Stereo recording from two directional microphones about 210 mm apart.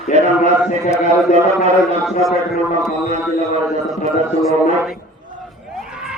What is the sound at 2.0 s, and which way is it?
Speech, centre (ahead or behind).